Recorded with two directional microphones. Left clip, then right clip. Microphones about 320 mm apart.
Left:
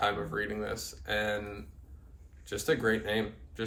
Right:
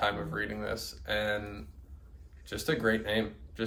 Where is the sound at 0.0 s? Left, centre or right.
Centre.